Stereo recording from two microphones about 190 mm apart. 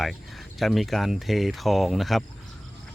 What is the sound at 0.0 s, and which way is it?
Speech, centre (ahead or behind).